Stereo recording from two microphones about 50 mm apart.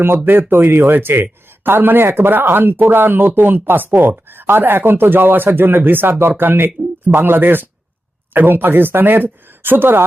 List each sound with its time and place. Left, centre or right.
0.3 s speech: right